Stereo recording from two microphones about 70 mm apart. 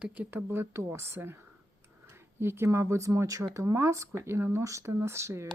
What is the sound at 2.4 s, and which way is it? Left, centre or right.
Speech, right.